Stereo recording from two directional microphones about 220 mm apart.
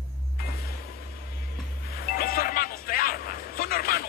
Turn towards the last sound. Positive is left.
turn(degrees=40)  # may be behind; listen again after turning